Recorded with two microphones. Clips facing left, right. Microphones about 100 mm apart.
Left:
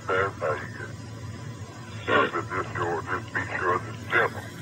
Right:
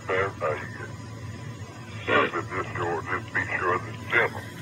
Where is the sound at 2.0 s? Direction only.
25° left (ahead or behind).